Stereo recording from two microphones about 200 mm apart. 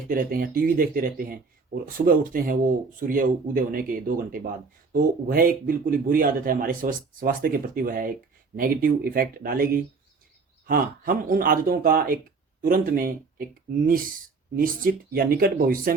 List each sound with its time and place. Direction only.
0.1 s speech: 45° right (ahead or behind)
14.5 s speech: 45° right (ahead or behind)